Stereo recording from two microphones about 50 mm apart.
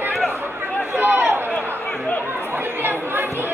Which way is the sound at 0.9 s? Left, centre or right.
Right.